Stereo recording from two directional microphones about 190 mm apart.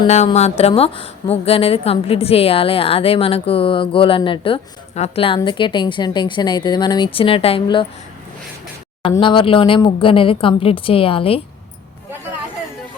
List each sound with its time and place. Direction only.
0.3 s a woman's voice: 35° left (ahead or behind)
9.2 s a woman's voice: 25° left (ahead or behind)